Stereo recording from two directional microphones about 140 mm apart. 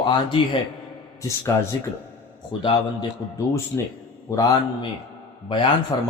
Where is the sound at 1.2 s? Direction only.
20° left (ahead or behind).